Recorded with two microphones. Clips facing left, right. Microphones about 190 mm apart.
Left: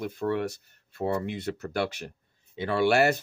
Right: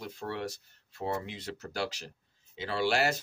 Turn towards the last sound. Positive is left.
turn(degrees=60)  # may be behind; listen again after turning